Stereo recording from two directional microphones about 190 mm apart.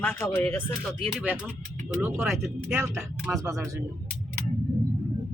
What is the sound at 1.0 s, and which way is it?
Speech, 5° right (ahead or behind).